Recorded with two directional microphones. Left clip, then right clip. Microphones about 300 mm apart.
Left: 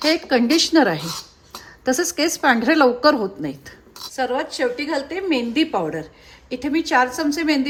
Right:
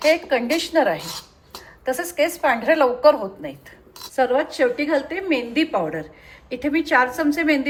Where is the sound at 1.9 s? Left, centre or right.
Centre.